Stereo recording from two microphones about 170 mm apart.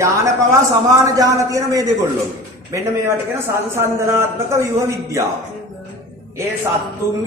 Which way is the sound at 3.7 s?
15° right (ahead or behind).